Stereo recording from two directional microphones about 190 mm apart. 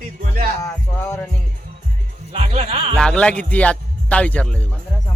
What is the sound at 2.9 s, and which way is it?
Speech, 5° left (ahead or behind).